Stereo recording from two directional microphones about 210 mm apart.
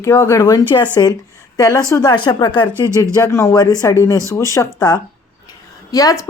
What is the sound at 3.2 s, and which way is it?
Speech, 15° left (ahead or behind).